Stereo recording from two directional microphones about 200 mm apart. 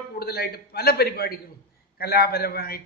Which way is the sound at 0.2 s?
50° left (ahead or behind).